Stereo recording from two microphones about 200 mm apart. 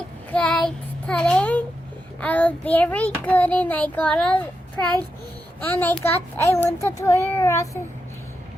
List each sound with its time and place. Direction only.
0.3 s child singing: 5° left (ahead or behind)